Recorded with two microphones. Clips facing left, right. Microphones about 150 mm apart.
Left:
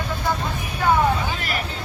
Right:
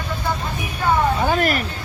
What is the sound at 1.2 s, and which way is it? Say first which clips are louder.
Vehicle: right 10 dB; 55° right (ahead or behind).